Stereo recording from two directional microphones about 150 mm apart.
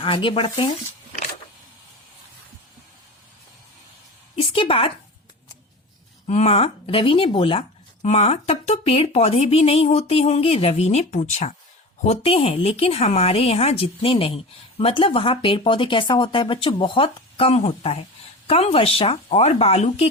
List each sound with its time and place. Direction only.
0.0 s speech: 35° left (ahead or behind)
4.4 s a woman's voice: 35° left (ahead or behind)
6.2 s speech: 45° left (ahead or behind)
8.0 s speech: 45° left (ahead or behind)